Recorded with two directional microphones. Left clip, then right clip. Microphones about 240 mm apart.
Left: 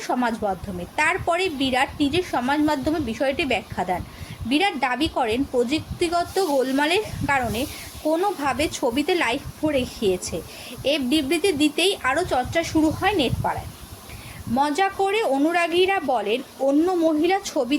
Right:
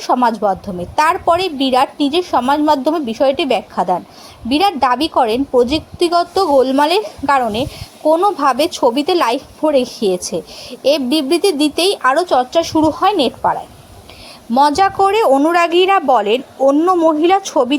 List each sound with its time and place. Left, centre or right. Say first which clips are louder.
0.0 s a woman's voice: right 10 dB; right
14.5 s a woman's voice: right 10 dB; right